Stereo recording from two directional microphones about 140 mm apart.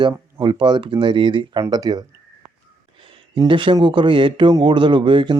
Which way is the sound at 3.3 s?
35° right (ahead or behind).